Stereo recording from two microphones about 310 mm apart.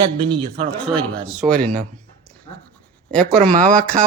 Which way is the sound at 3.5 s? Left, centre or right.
Right.